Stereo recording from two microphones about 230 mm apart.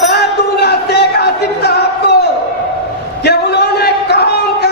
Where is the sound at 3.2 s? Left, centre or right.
Left.